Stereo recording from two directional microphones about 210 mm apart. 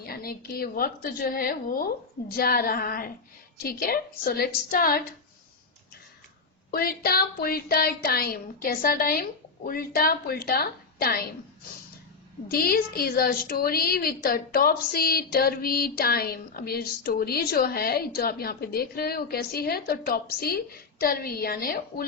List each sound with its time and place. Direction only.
0.0 s a woman's voice: 45° left (ahead or behind)
6.7 s a woman's voice: 45° left (ahead or behind)
12.5 s a woman's voice: 45° left (ahead or behind)